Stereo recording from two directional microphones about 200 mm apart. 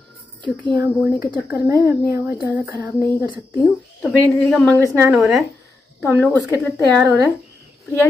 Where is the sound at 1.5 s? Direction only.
15° right (ahead or behind).